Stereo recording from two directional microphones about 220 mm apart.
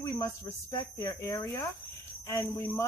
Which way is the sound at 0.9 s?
15° left (ahead or behind).